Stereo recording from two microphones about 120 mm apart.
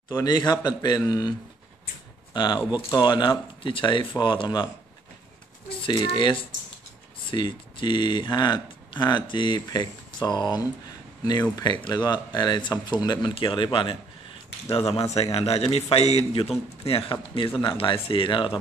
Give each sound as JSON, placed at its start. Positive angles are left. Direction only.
{"t": 0.1, "sound": "speech", "side_deg": 35}
{"t": 2.3, "sound": "speech", "side_deg": 40}
{"t": 5.7, "sound": "speech", "side_deg": 45}
{"t": 11.8, "sound": "speech", "side_deg": 35}